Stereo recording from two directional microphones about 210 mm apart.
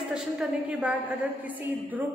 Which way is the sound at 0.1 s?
5° right (ahead or behind).